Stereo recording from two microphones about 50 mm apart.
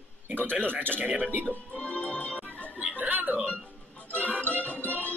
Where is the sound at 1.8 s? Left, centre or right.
Left.